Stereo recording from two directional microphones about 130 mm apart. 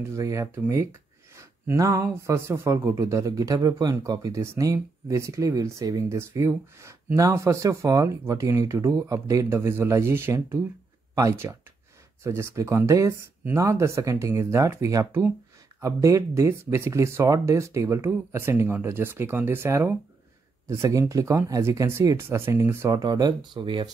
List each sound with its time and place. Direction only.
0.0 s speech: 25° right (ahead or behind); by 23.9 s 40° right (ahead or behind)